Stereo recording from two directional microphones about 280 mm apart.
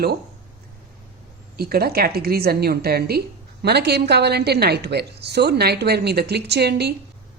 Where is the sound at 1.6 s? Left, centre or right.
Right.